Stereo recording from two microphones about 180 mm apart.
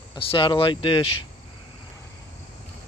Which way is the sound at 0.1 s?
30° left (ahead or behind).